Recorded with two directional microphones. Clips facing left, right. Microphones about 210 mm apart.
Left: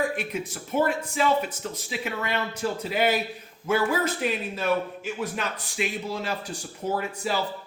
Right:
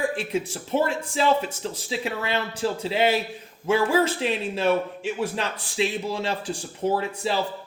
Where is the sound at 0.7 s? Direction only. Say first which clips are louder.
Right 1 dB; 30° right (ahead or behind).